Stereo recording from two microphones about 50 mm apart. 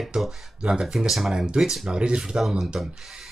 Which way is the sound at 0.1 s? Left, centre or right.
Centre.